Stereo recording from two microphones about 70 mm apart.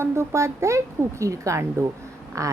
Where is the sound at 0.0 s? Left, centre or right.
Right.